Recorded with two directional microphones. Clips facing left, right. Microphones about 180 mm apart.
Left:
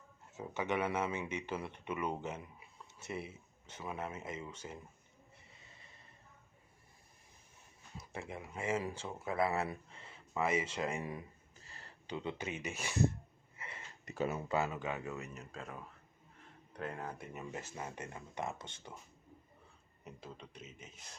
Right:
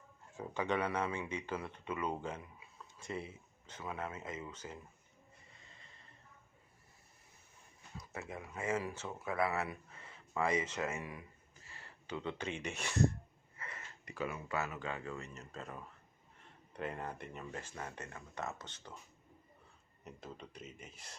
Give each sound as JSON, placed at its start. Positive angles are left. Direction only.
{"t": 0.3, "sound": "speech", "side_deg": 20}
{"t": 2.2, "sound": "a sound", "side_deg": 20}
{"t": 3.0, "sound": "speech", "side_deg": 10}
{"t": 7.9, "sound": "speech", "side_deg": 30}
{"t": 11.6, "sound": "a sound", "side_deg": 35}
{"t": 12.1, "sound": "speech", "side_deg": 15}
{"t": 13.6, "sound": "a sound", "side_deg": 25}
{"t": 14.1, "sound": "speech", "side_deg": 25}
{"t": 15.0, "sound": "a man's voice", "side_deg": 5}
{"t": 20.1, "sound": "a man's voice", "side_deg": 0}